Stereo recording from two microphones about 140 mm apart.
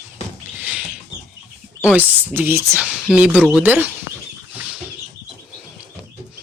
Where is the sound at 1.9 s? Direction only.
15° right (ahead or behind).